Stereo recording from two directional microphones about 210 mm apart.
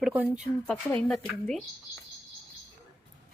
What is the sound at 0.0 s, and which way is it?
Speech, 10° right (ahead or behind).